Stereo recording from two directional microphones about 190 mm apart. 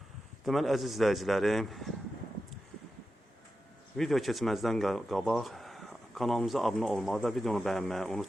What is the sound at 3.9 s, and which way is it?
Speech, centre (ahead or behind).